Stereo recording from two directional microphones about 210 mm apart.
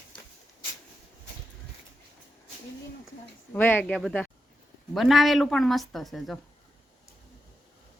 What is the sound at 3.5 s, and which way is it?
Speech, 10° left (ahead or behind).